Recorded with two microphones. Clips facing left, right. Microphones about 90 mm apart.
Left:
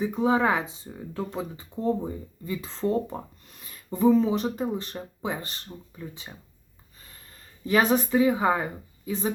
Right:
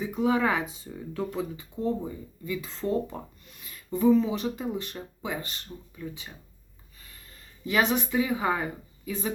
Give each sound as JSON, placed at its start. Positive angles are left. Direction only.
{"t": 0.0, "sound": "speech", "side_deg": 30}
{"t": 7.6, "sound": "speech", "side_deg": 35}